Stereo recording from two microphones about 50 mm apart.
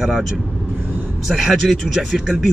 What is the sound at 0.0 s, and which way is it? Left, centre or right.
Speech, centre.